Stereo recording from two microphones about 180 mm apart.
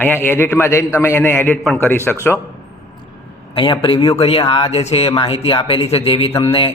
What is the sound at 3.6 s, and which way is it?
A man's voice, 30° left (ahead or behind).